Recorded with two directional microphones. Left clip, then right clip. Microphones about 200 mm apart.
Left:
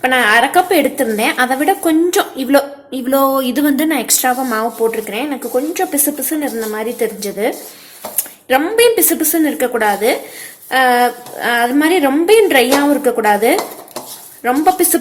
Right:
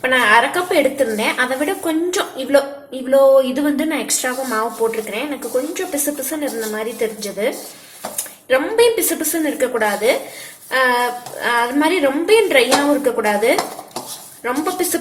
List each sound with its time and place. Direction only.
0.0 s a woman's voice: 50° left (ahead or behind)